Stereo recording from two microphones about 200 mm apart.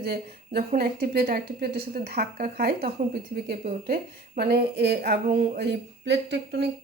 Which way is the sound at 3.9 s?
50° right (ahead or behind).